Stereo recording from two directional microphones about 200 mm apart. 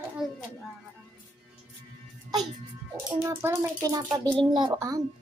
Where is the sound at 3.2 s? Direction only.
10° right (ahead or behind).